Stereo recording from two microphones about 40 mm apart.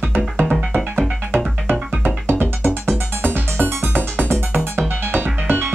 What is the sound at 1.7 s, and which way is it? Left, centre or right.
Music, right.